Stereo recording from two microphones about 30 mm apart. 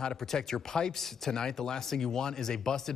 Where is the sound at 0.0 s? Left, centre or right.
Centre.